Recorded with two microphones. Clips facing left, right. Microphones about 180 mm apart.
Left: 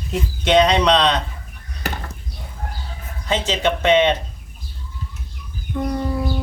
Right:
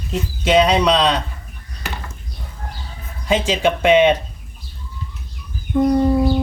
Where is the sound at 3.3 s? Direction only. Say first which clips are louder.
Right 3 dB; 10° right (ahead or behind).